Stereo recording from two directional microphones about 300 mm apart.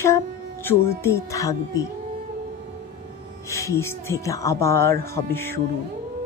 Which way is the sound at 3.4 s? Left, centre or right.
Centre.